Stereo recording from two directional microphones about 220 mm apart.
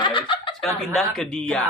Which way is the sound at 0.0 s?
20° left (ahead or behind).